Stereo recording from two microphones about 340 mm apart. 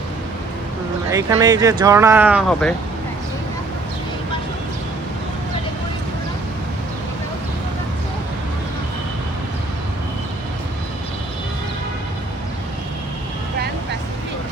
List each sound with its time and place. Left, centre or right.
1.1 s speech: centre